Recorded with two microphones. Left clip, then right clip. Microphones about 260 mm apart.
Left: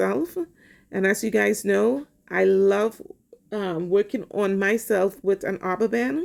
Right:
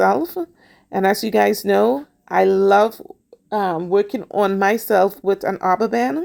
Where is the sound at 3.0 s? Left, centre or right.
Right.